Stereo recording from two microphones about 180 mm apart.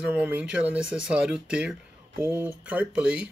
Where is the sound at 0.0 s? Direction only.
10° right (ahead or behind).